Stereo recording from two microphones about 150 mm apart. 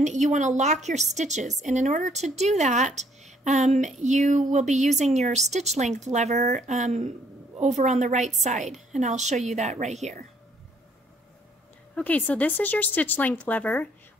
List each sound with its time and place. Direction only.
0.0 s a woman's voice: 50° right (ahead or behind)
11.9 s speech: 10° left (ahead or behind)